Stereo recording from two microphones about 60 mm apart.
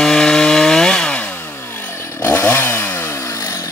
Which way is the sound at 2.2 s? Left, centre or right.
Left.